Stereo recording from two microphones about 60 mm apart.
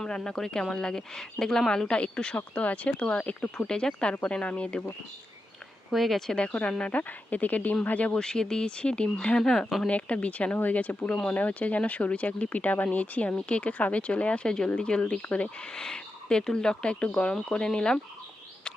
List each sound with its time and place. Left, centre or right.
0.0 s speech: centre
5.9 s speech: centre
6.4 s speech: centre
8.2 s speech: centre
9.8 s speech: left